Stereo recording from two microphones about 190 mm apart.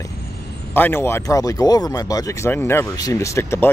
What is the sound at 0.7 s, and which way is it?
Speech, 10° left (ahead or behind).